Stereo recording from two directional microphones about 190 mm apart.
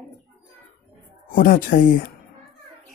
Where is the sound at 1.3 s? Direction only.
45° left (ahead or behind).